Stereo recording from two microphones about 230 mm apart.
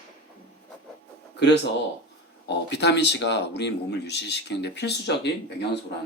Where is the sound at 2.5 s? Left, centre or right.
Left.